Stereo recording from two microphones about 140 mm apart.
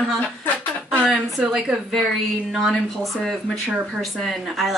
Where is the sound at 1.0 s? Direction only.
5° right (ahead or behind).